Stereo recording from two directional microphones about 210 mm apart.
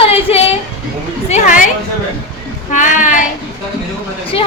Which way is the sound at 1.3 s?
40° left (ahead or behind).